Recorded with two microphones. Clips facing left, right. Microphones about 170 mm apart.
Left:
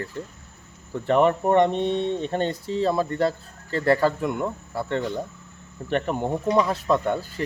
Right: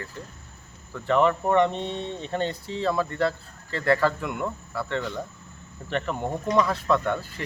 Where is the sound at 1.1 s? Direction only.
50° left (ahead or behind).